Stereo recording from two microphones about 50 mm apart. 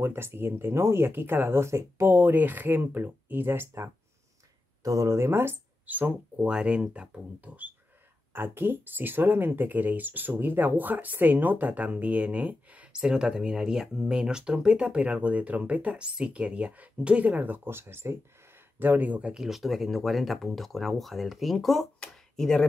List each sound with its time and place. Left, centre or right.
0.0 s speech: right
1.6 s speech: right
2.1 s speech: right
4.8 s speech: right
5.9 s speech: right
6.3 s speech: centre
8.3 s speech: right
12.9 s speech: centre; by 17.6 s right
17.6 s speech: right
19.3 s speech: centre